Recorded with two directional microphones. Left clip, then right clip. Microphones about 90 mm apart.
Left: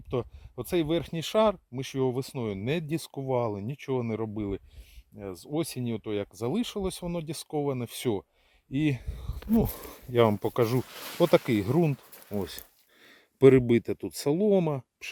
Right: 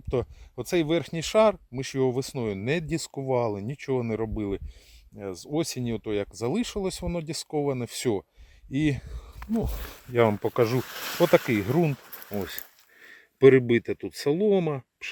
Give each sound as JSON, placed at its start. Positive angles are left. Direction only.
{"t": 0.1, "sound": "speech", "side_deg": 35}
{"t": 8.7, "sound": "speech", "side_deg": 50}
{"t": 9.0, "sound": "speech", "side_deg": 75}
{"t": 10.1, "sound": "speech", "side_deg": 50}
{"t": 10.3, "sound": "speech", "side_deg": 35}
{"t": 11.2, "sound": "speech", "side_deg": 50}